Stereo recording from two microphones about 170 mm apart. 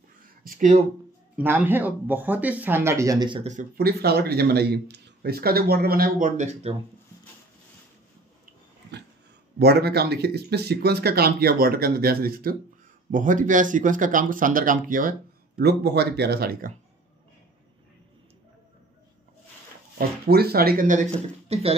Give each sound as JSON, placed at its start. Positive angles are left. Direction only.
{"t": 0.4, "sound": "speech", "side_deg": -55}
{"t": 1.3, "sound": "speech", "side_deg": -10}
{"t": 3.7, "sound": "speech", "side_deg": -65}
{"t": 9.6, "sound": "speech", "side_deg": -75}
{"t": 20.0, "sound": "speech", "side_deg": -65}